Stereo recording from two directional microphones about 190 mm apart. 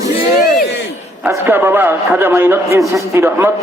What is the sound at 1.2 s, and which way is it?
A man's voice, 10° right (ahead or behind).